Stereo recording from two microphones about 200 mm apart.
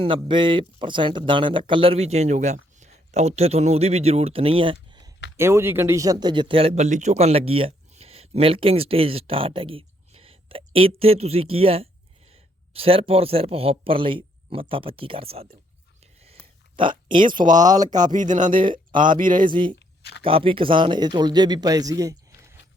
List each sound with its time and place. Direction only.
0.3 s a man's voice: 25° right (ahead or behind)
16.7 s speech: 25° right (ahead or behind)
17.4 s speech: 40° right (ahead or behind)
19.5 s speech: 25° right (ahead or behind)
20.0 s a sound: 55° left (ahead or behind)
20.2 s speech: 25° right (ahead or behind)